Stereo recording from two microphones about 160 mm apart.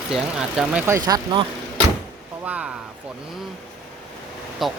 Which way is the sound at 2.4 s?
10° right (ahead or behind).